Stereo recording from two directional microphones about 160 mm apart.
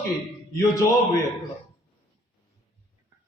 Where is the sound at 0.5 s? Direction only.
20° left (ahead or behind).